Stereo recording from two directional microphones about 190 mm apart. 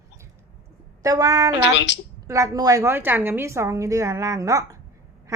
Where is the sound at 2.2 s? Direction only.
15° right (ahead or behind).